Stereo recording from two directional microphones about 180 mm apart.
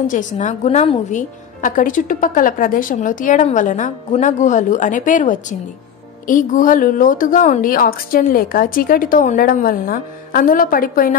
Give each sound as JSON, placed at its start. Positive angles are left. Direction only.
{"t": 0.0, "sound": "a woman's voice", "side_deg": 45}